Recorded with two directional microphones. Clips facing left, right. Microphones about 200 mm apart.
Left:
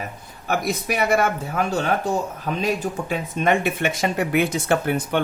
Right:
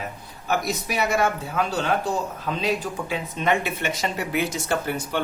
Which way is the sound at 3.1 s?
50° left (ahead or behind).